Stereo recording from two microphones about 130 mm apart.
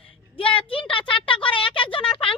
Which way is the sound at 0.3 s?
45° left (ahead or behind).